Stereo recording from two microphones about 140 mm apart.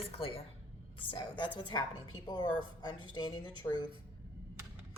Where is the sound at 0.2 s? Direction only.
40° left (ahead or behind).